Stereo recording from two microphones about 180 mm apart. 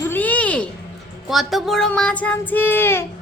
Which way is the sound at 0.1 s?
10° left (ahead or behind).